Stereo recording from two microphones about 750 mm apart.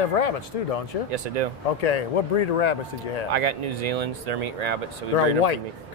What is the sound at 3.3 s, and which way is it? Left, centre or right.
Speech, right.